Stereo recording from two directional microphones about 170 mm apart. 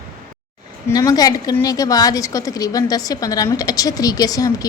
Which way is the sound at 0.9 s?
20° left (ahead or behind).